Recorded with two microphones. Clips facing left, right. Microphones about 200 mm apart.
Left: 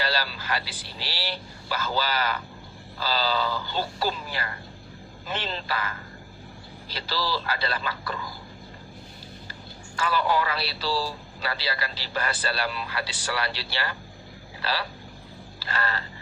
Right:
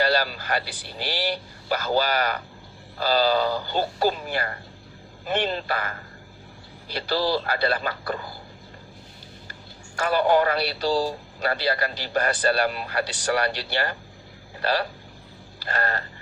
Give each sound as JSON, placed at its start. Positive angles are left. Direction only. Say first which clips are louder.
{"t": 0.0, "sound": "speech", "louder": "right 6 dB", "side_deg": -50}
{"t": 7.4, "sound": "speech", "louder": "right 5 dB", "side_deg": -50}
{"t": 8.0, "sound": "a sound", "louder": "right 4 dB", "side_deg": -35}
{"t": 10.0, "sound": "speech", "louder": "right 5 dB", "side_deg": -50}